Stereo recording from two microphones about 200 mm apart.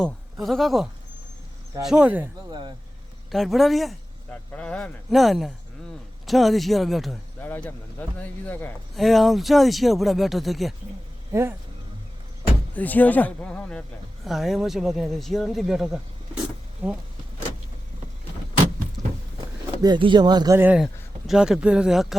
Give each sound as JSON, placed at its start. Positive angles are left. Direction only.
{"t": 0.0, "sound": "speech", "side_deg": 0}
{"t": 2.5, "sound": "speech", "side_deg": -20}
{"t": 3.3, "sound": "speech", "side_deg": 0}
{"t": 11.3, "sound": "speech", "side_deg": -15}
{"t": 12.7, "sound": "a man's voice", "side_deg": 10}
{"t": 19.8, "sound": "speech", "side_deg": -25}